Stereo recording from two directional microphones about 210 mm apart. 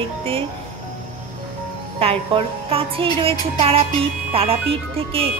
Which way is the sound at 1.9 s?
25° right (ahead or behind).